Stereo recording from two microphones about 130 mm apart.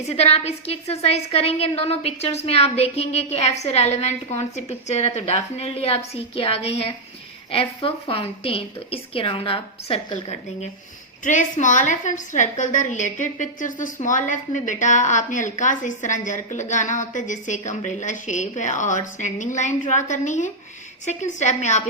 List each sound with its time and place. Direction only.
0.0 s a woman's voice: 55° left (ahead or behind)
11.2 s a woman's voice: 70° left (ahead or behind)